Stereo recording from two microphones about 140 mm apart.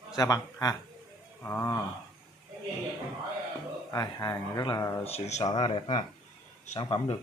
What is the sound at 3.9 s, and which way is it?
Speech, 25° left (ahead or behind).